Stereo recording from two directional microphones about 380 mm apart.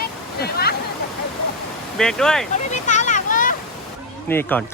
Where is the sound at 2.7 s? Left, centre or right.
Centre.